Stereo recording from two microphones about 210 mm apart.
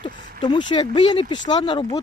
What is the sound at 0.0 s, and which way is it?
Speech, 20° left (ahead or behind).